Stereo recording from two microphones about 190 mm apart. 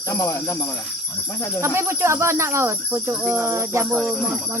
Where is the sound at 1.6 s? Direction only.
15° right (ahead or behind).